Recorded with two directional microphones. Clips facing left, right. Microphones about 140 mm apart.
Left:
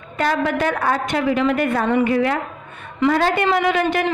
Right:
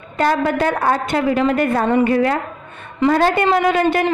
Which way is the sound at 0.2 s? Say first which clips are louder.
Right 3 dB; 40° right (ahead or behind).